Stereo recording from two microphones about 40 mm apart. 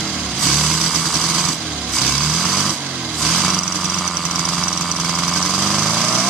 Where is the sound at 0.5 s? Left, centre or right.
Centre.